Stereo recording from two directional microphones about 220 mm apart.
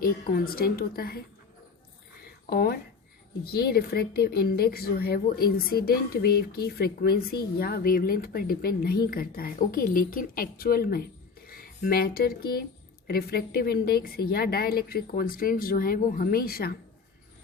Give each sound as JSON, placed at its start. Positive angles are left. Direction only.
{"t": 0.0, "sound": "a woman's voice", "side_deg": 40}
{"t": 2.2, "sound": "a sound", "side_deg": 45}
{"t": 3.4, "sound": "a woman's voice", "side_deg": 45}